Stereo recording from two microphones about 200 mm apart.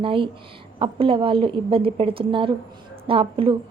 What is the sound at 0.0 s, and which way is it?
A woman's voice, 25° right (ahead or behind).